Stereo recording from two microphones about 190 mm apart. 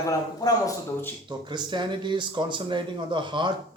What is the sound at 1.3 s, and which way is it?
Speech, 25° right (ahead or behind).